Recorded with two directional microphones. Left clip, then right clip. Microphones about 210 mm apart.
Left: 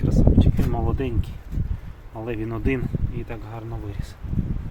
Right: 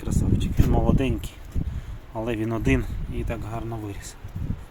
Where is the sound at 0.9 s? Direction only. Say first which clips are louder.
Right 2 dB; 25° right (ahead or behind).